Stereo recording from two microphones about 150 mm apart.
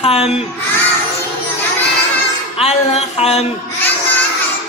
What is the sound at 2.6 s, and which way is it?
Speech, 45° left (ahead or behind).